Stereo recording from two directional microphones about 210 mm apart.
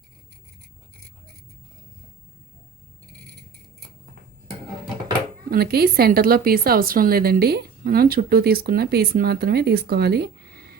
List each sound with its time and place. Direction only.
5.5 s a woman's voice: 45° right (ahead or behind)